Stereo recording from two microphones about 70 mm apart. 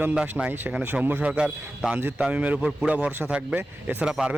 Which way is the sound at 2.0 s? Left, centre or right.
Right.